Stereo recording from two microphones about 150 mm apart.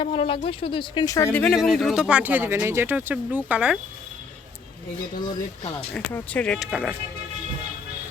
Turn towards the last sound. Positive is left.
turn(degrees=0)  # may be behind; listen again after turning